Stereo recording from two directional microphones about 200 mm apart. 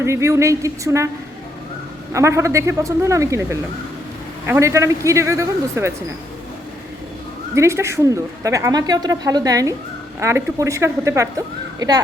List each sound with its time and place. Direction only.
0.0 s speech: 15° right (ahead or behind)
2.1 s speech: 15° right (ahead or behind)
7.5 s speech: 15° right (ahead or behind)